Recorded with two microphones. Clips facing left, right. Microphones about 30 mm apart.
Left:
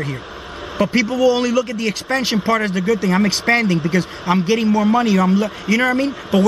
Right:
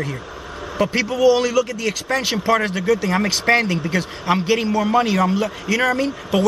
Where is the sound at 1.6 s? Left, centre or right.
Left.